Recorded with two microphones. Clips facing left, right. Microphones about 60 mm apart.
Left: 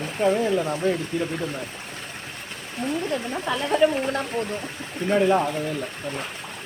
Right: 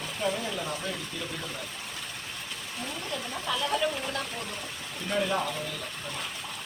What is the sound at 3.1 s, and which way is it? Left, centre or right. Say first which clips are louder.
Speech: left 6 dB; left.